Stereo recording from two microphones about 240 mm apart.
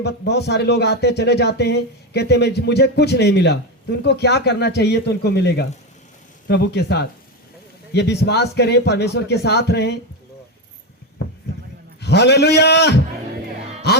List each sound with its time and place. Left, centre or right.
0.0 s speech: left
11.9 s a man's voice: left